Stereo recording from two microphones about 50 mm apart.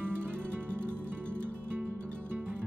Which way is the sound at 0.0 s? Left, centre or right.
Right.